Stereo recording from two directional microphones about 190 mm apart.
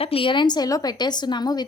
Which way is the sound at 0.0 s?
30° left (ahead or behind).